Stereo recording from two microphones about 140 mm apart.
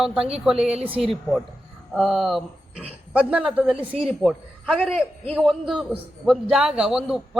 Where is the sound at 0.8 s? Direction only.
40° right (ahead or behind).